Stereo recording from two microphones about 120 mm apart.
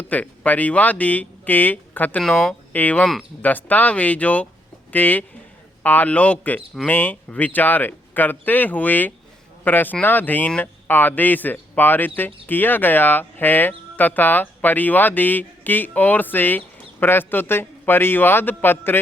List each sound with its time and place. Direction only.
0.0 s speech: 15° left (ahead or behind)